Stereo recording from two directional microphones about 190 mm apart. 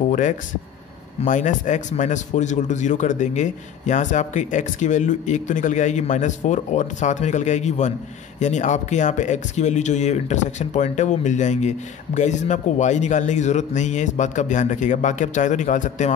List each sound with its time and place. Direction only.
1.2 s speech: 40° left (ahead or behind)